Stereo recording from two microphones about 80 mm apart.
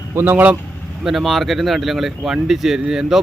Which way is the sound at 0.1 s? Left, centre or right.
Right.